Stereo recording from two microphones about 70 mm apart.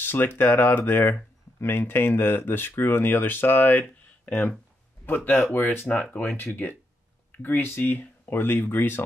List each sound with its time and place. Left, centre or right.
0.0 s speech: left